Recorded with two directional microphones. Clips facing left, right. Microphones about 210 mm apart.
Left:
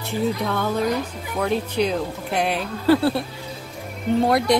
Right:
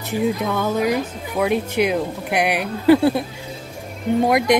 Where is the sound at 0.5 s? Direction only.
5° right (ahead or behind).